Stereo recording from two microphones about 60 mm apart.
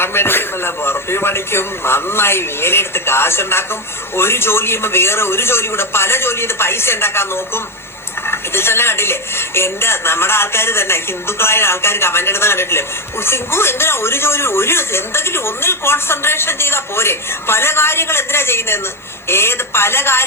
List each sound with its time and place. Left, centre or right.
0.0 s speech: left